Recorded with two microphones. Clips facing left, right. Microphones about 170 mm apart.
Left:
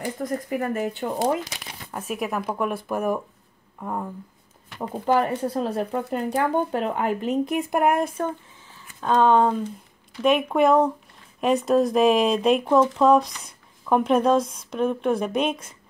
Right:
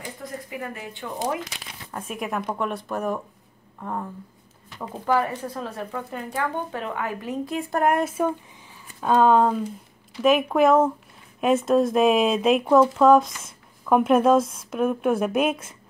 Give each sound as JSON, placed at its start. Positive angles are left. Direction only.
{"t": 0.2, "sound": "speech", "side_deg": 45}
{"t": 1.9, "sound": "speech", "side_deg": 5}
{"t": 4.9, "sound": "speech", "side_deg": 25}
{"t": 7.8, "sound": "speech", "side_deg": 0}